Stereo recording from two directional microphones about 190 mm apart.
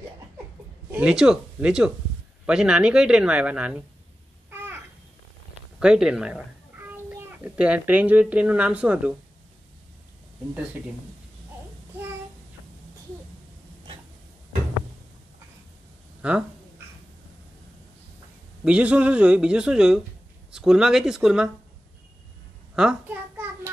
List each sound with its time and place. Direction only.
0.9 s speech: 5° right (ahead or behind)
4.5 s babbling: 10° right (ahead or behind)
5.8 s a child's voice: 5° right (ahead or behind)
16.2 s speech: 5° right (ahead or behind)
18.6 s speech: 5° right (ahead or behind)
22.8 s speech: 5° right (ahead or behind)